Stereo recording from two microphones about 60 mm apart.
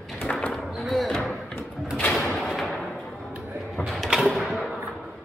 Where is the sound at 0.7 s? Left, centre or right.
Centre.